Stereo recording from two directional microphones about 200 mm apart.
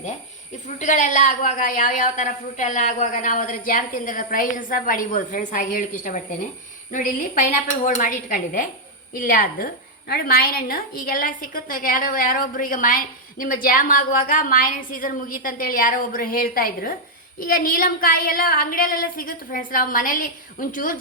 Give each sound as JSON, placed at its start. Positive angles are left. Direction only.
{"t": 0.8, "sound": "a woman's voice", "side_deg": 40}